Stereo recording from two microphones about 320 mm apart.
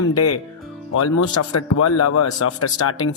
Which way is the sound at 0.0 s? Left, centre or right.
Left.